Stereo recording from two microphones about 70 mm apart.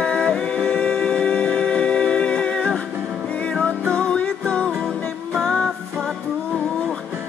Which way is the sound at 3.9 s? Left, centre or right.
Centre.